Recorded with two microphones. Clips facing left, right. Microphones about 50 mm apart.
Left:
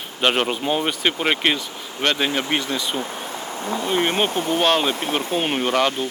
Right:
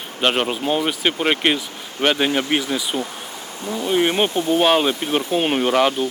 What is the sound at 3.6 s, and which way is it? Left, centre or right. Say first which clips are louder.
Speech: right 2 dB; left.